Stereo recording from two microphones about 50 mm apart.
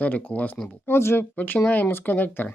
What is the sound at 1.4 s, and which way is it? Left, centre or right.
Speech, left.